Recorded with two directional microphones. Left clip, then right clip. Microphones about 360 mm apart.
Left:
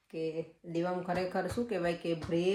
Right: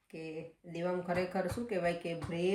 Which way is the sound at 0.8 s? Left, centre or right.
Centre.